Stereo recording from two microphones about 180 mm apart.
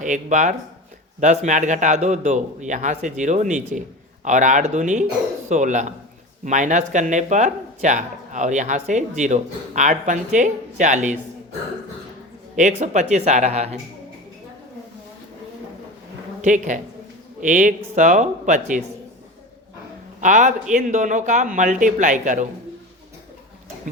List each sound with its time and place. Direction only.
0.0 s speech: 45° right (ahead or behind)
12.5 s speech: 40° right (ahead or behind)
16.4 s speech: 45° right (ahead or behind)
20.2 s speech: 45° right (ahead or behind)